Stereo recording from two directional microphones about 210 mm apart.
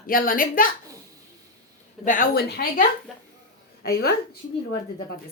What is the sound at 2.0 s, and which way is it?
Speech, 40° left (ahead or behind).